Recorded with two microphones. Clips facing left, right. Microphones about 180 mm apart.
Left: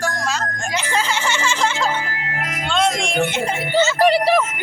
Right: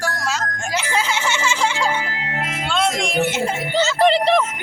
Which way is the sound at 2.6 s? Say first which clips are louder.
Left 2 dB; 5° right (ahead or behind).